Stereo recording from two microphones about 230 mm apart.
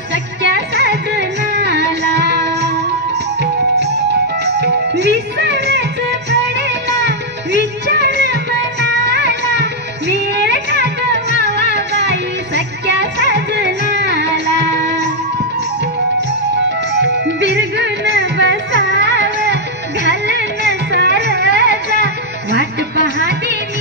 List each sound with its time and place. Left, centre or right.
0.1 s music: right
3.7 s music: right
16.9 s music: right
20.1 s music: right